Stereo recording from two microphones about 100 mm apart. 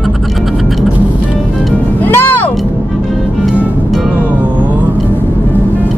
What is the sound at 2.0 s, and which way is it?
Music, 20° left (ahead or behind).